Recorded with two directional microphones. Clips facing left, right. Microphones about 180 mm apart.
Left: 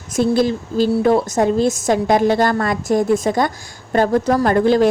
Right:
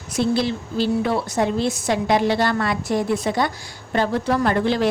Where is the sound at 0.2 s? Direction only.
45° left (ahead or behind).